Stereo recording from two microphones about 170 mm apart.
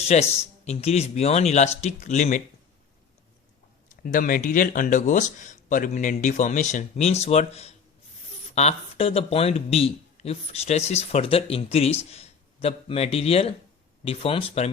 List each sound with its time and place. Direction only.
0.1 s speech: 40° left (ahead or behind)
4.0 s speech: 50° left (ahead or behind); by 14.7 s 35° left (ahead or behind)